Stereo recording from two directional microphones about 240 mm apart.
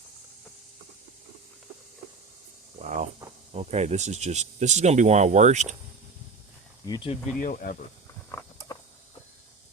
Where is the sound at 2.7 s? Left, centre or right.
Right.